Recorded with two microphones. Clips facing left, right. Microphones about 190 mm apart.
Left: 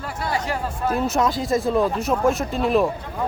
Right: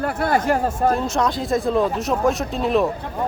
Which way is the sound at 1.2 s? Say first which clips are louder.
Even; centre (ahead or behind).